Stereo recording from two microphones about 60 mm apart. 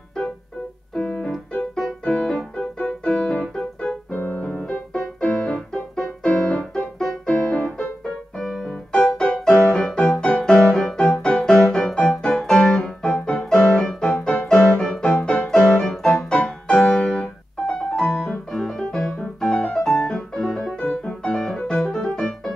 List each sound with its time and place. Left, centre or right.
0.9 s keyboard: centre
4.1 s music: left
5.2 s keyboard: centre
8.4 s music: centre
12.8 s piano: centre
14.5 s music: centre
15.4 s piano: centre
16.1 s music: centre
21.4 s music: centre
21.6 s music: centre